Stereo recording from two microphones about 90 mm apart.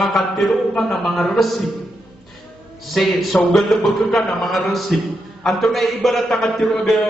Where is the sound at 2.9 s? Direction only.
Centre (ahead or behind).